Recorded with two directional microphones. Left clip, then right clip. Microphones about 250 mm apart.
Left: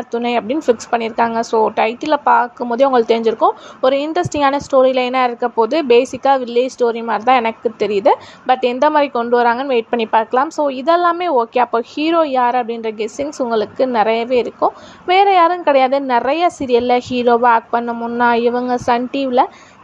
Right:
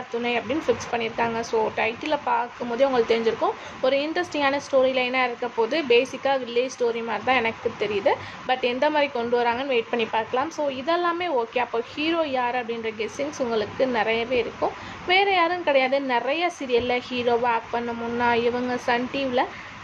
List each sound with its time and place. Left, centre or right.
0.1 s speech: left